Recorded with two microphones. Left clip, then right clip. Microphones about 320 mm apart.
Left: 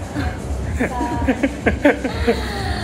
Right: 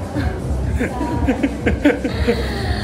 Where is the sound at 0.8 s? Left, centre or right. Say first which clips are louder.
Left 1 dB; centre.